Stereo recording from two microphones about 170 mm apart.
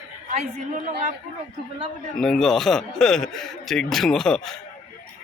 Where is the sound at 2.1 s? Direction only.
5° left (ahead or behind).